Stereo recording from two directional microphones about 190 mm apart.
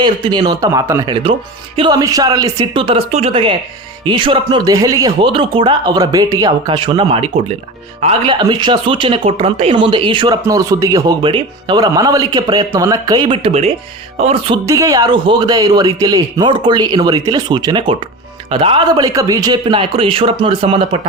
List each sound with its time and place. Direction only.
0.0 s speech: 25° right (ahead or behind)
14.2 s music: 30° right (ahead or behind)
14.7 s speech: 15° right (ahead or behind)